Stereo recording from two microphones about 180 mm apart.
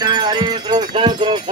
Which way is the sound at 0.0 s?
25° right (ahead or behind).